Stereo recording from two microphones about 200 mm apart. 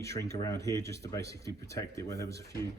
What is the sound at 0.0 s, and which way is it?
Speech, 15° left (ahead or behind).